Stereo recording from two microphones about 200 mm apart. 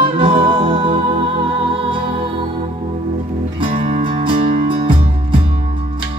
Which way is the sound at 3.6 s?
25° right (ahead or behind).